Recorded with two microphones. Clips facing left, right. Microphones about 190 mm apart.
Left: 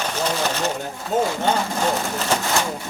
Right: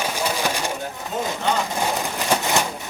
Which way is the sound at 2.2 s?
15° right (ahead or behind).